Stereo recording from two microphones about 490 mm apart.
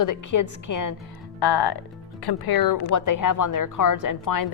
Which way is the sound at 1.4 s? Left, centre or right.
Left.